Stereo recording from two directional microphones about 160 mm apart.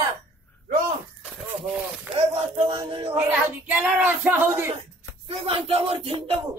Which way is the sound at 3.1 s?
5° right (ahead or behind).